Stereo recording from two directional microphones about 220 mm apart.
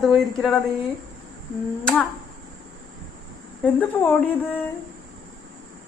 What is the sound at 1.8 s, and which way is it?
Speech, 5° left (ahead or behind).